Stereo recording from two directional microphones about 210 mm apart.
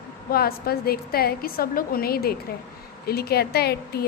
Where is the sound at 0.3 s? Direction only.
45° left (ahead or behind).